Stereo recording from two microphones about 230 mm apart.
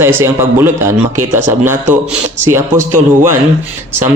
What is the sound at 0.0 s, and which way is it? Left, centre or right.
Speech, centre.